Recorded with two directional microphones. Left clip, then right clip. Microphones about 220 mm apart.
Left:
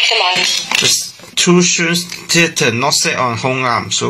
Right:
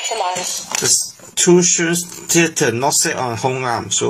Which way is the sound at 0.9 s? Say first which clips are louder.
Left 3 dB; 50° right (ahead or behind).